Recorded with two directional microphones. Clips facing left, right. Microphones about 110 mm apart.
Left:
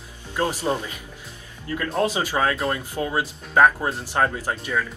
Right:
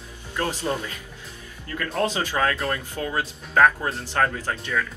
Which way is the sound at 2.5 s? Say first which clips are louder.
Left 2 dB; 30° left (ahead or behind).